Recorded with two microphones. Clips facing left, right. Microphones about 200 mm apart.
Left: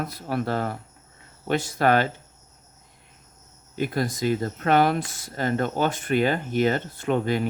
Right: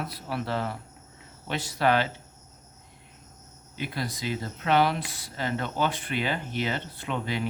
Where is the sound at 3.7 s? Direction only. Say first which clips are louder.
Left 7 dB; 45° left (ahead or behind).